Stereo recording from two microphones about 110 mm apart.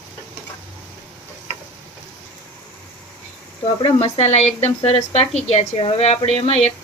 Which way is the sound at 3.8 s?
60° left (ahead or behind).